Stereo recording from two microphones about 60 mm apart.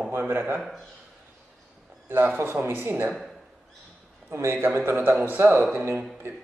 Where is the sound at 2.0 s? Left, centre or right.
Right.